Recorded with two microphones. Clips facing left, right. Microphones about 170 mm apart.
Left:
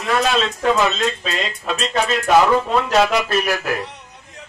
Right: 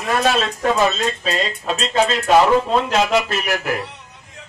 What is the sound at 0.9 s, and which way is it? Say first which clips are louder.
Speech: right 1 dB; 35° right (ahead or behind).